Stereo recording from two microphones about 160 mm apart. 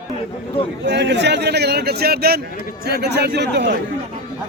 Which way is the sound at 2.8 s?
90° right.